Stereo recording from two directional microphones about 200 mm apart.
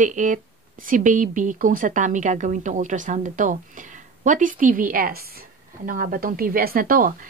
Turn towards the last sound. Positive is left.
turn(degrees=-45)  # may be behind; listen again after turning